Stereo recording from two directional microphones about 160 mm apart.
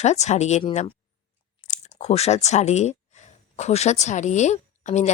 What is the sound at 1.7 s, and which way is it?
Speech, 45° left (ahead or behind).